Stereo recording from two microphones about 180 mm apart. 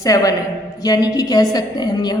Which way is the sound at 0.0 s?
20° left (ahead or behind).